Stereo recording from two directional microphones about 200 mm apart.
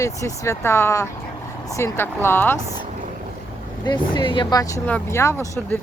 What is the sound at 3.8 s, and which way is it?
Speech, 20° left (ahead or behind).